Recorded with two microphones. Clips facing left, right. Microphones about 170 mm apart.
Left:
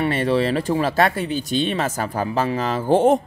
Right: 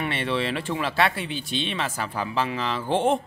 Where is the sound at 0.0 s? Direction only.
40° left (ahead or behind).